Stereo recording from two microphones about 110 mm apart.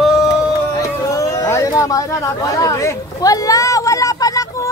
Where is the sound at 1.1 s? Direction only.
30° left (ahead or behind).